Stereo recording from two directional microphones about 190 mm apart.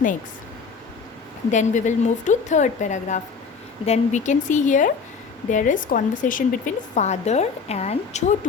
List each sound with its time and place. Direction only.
1.5 s a woman's voice: 40° left (ahead or behind)